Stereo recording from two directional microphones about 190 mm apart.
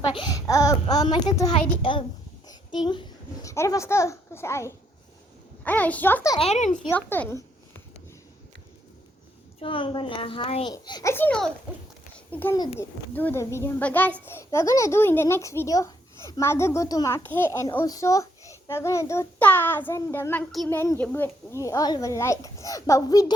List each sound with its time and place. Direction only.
0.1 s a child's voice: 20° left (ahead or behind)
6.4 s speech: 35° left (ahead or behind)
6.9 s a child's voice: 10° left (ahead or behind)
9.6 s a child's voice: 25° left (ahead or behind); by 12.5 s 10° left (ahead or behind)
12.5 s a child's voice: 20° left (ahead or behind)